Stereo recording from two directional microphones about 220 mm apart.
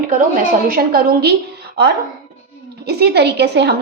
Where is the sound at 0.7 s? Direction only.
45° right (ahead or behind).